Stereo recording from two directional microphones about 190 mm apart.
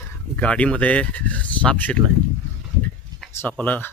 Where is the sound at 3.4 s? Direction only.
10° left (ahead or behind).